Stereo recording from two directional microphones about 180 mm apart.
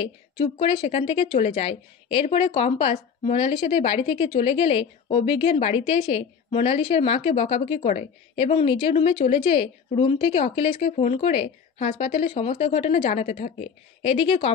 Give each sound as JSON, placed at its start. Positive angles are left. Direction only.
{"t": 0.0, "sound": "speech", "side_deg": 30}